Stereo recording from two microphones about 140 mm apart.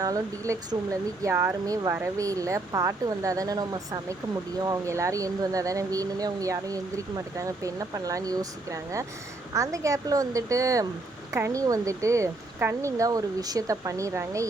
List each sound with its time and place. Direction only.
0.0 s speech: 25° right (ahead or behind)